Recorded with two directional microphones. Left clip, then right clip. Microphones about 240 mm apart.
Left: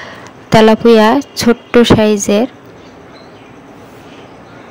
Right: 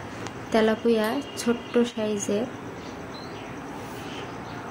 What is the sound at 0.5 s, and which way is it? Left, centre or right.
Speech, left.